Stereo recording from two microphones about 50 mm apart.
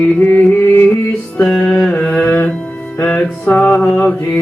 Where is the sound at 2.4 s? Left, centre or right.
Left.